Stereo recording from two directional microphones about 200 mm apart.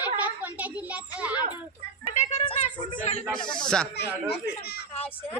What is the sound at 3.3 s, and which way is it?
Speech, 20° left (ahead or behind).